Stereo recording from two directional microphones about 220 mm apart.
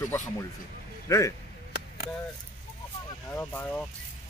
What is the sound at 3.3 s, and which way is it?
Speech, 10° left (ahead or behind).